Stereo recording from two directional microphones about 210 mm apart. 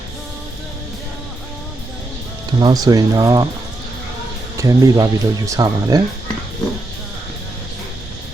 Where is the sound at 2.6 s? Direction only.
20° right (ahead or behind).